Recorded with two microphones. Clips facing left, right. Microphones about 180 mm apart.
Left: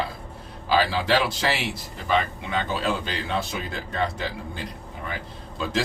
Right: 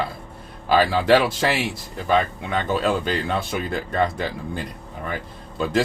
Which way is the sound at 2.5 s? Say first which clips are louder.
Right 4 dB; 50° right (ahead or behind).